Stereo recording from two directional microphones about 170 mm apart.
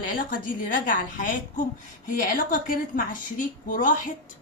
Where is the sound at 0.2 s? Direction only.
55° left (ahead or behind).